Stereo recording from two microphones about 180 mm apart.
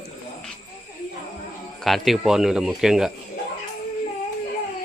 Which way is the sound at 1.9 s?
Centre (ahead or behind).